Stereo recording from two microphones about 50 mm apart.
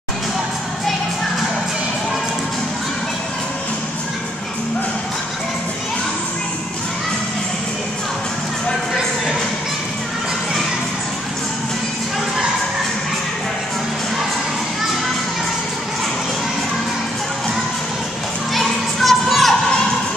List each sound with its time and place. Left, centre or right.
18.5 s music: centre